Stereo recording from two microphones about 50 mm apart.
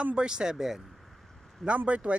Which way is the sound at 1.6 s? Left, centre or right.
Centre.